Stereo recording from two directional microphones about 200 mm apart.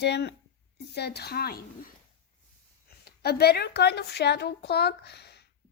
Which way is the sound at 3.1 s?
50° left (ahead or behind).